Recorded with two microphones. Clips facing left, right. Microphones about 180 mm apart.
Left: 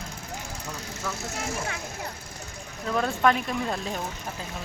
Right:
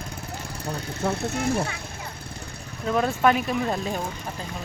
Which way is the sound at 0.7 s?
60° right (ahead or behind).